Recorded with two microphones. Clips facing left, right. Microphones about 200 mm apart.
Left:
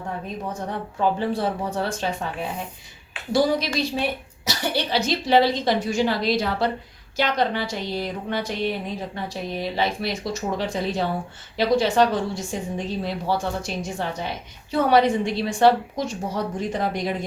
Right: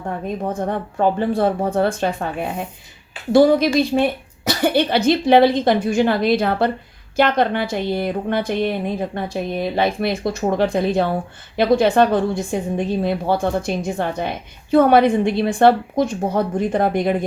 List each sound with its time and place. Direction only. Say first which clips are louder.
0.4 s a woman's voice: right 8 dB; 55° right (ahead or behind)